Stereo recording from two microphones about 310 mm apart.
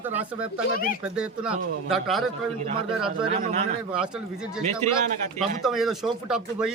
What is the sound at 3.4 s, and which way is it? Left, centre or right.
Speech, right.